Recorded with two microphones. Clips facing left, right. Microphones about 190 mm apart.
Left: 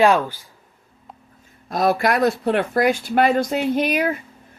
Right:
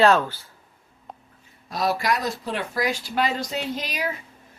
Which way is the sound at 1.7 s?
50° left (ahead or behind).